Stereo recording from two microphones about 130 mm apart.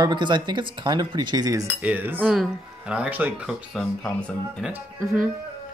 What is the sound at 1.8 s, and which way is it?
Speech, 15° right (ahead or behind).